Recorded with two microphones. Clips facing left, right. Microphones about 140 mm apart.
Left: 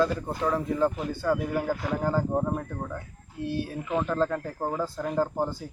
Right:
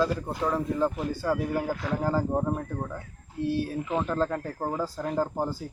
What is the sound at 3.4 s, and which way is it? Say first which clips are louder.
Speech: right 3 dB; centre (ahead or behind).